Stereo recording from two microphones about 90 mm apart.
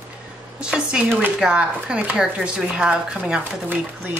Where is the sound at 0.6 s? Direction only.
10° right (ahead or behind).